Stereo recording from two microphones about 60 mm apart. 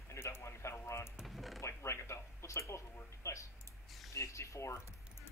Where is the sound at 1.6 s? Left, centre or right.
Left.